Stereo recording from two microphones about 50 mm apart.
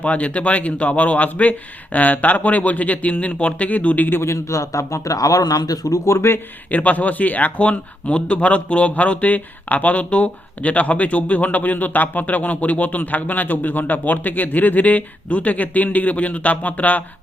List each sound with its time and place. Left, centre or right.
0.0 s speech: left
4.1 s speech: left
5.9 s speech: left
6.7 s speech: left